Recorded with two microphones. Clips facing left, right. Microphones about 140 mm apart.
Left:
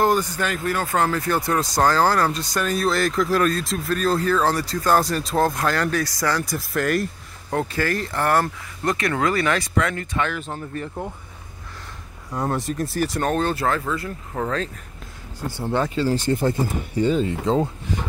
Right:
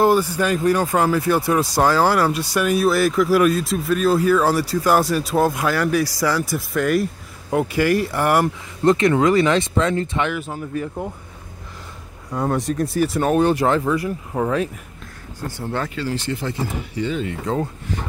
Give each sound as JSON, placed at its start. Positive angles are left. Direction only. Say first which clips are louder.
{"t": 0.0, "sound": "speech", "louder": "right 4 dB", "side_deg": -5}
{"t": 7.5, "sound": "speech", "louder": "right 5 dB", "side_deg": -10}
{"t": 8.8, "sound": "speech", "louder": "right 7 dB", "side_deg": -25}
{"t": 10.4, "sound": "speech", "louder": "right 4 dB", "side_deg": -5}
{"t": 12.3, "sound": "speech", "louder": "right 3 dB", "side_deg": 0}
{"t": 15.6, "sound": "speech", "louder": "left 3 dB", "side_deg": 20}
{"t": 16.0, "sound": "speech", "louder": "left 4 dB", "side_deg": 40}